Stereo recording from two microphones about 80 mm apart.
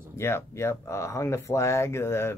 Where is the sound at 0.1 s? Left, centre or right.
Left.